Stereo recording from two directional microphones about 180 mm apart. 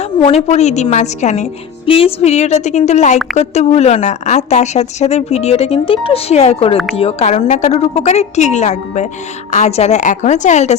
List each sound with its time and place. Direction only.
0.3 s a woman's voice: 35° left (ahead or behind)